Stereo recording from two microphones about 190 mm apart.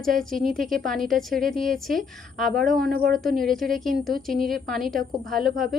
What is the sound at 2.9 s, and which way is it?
Speech, 50° right (ahead or behind).